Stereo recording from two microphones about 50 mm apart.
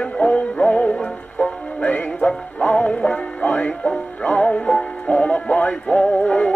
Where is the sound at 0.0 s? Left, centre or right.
Left.